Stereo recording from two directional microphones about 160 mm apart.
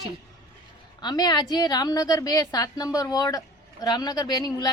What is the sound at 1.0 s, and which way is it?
Speech, 25° left (ahead or behind).